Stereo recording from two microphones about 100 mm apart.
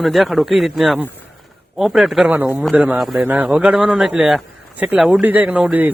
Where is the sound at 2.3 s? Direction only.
15° right (ahead or behind).